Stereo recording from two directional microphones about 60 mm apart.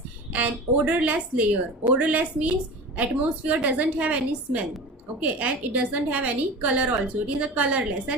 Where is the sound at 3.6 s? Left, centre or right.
Right.